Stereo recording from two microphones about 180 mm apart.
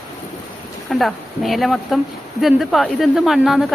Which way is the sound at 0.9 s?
Centre (ahead or behind).